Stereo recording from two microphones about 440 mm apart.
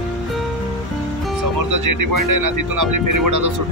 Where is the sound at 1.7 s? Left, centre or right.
Right.